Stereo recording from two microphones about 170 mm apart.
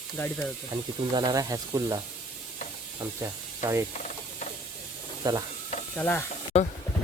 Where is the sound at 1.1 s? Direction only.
25° right (ahead or behind).